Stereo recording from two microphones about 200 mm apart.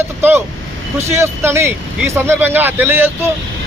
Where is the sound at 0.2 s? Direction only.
10° right (ahead or behind).